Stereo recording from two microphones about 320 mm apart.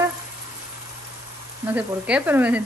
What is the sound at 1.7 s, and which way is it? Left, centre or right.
Speech, centre.